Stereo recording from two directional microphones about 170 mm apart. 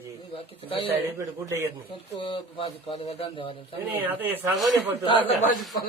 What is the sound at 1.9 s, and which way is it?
A man's voice, 30° left (ahead or behind).